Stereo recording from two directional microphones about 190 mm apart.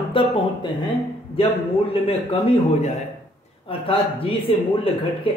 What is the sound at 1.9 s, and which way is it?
Speech, 30° left (ahead or behind).